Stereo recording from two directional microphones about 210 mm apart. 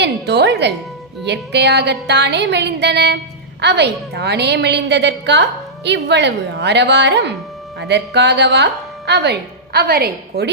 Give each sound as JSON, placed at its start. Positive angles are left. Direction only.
{"t": 0.0, "sound": "a woman's voice", "side_deg": -55}
{"t": 1.2, "sound": "music", "side_deg": -55}
{"t": 3.6, "sound": "a woman's voice", "side_deg": -55}